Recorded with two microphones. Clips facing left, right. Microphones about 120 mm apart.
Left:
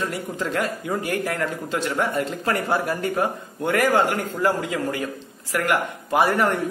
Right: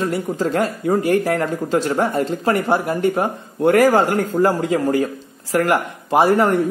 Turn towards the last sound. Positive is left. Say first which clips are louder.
# right 5 dB
turn(degrees=-25)  # may be behind; listen again after turning